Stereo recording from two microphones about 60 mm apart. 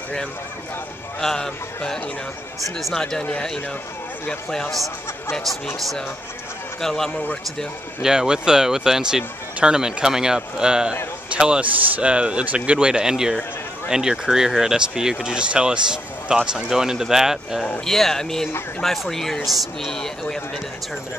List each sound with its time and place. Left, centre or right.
1.2 s speech: centre
2.8 s speech: centre
6.8 s speech: centre
8.0 s a man's voice: centre
17.6 s speech: centre